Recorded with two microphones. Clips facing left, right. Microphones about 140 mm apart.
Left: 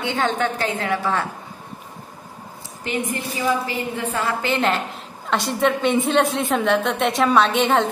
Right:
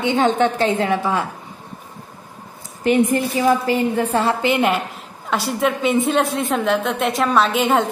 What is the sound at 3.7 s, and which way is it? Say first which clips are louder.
Speech: right 8 dB; 40° right (ahead or behind).